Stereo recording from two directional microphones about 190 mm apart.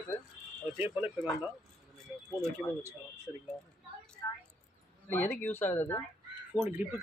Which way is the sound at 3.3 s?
5° right (ahead or behind).